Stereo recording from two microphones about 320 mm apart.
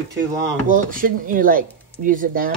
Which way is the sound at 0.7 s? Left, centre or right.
Right.